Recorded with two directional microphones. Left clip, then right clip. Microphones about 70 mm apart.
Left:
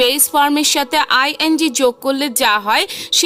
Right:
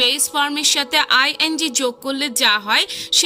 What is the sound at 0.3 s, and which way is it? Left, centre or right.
A woman's voice, left.